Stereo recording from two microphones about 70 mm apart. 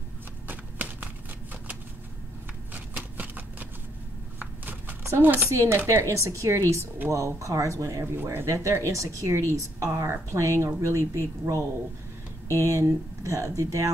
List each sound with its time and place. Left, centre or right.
0.5 s horse: right
2.7 s shuffling cards: right
4.4 s a sound: right
5.0 s speech: right
5.5 s speech: right